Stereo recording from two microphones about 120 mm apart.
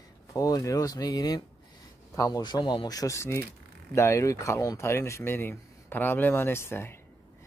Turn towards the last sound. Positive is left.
turn(degrees=20)  # may be behind; listen again after turning